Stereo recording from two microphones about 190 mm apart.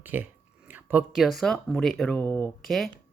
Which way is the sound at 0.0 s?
10° right (ahead or behind).